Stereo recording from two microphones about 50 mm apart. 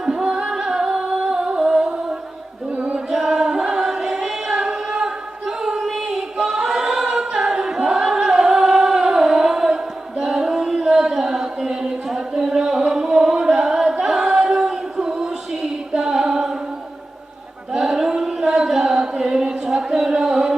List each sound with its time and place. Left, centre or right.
0.0 s music: centre
2.7 s female singing: right
3.1 s choir: centre
4.6 s a sound: centre
6.3 s choir: centre
14.0 s singing: centre
16.0 s a capella: centre
17.7 s a sound: centre
20.2 s music: centre